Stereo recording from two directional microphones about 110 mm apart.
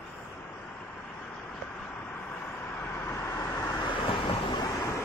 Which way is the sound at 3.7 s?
50° left (ahead or behind).